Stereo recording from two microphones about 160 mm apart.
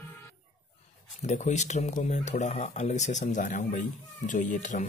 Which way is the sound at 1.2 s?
50° left (ahead or behind).